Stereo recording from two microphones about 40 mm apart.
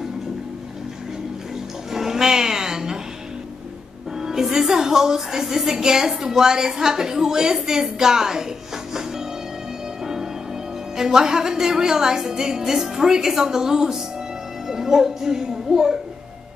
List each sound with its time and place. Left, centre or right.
1.9 s a sound: centre
4.2 s a woman's voice: centre
11.0 s a woman's voice: centre